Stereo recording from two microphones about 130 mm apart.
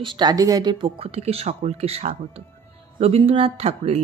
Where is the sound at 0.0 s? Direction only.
35° right (ahead or behind).